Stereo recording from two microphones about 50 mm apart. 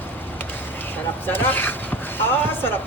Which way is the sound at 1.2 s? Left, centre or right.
Left.